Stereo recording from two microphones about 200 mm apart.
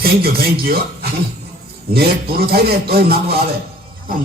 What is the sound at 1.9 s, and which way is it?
A man's voice, 50° right (ahead or behind).